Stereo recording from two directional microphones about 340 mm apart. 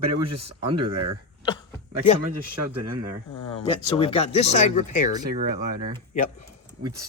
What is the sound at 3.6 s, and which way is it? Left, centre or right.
Speech, centre.